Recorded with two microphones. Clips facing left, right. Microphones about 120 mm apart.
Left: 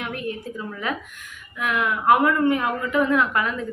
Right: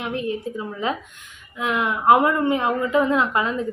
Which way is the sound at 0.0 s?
25° right (ahead or behind).